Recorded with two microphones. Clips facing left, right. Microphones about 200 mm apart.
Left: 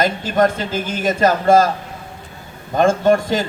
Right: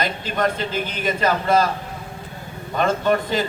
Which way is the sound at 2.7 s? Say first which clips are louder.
Left 5 dB; 45° left (ahead or behind).